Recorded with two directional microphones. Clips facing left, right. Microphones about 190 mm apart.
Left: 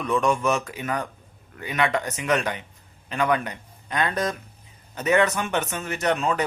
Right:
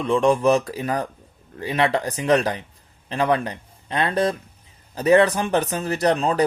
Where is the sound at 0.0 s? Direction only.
30° right (ahead or behind).